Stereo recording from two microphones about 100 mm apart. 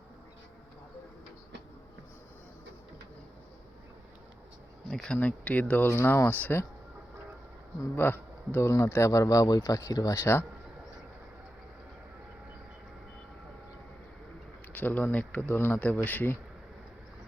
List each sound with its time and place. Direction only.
4.9 s speech: 5° left (ahead or behind)
7.9 s speech: 20° left (ahead or behind)
14.7 s speech: 15° left (ahead or behind)